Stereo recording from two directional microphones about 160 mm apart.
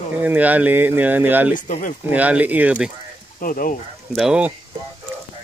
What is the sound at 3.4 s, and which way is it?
Speech, 60° left (ahead or behind).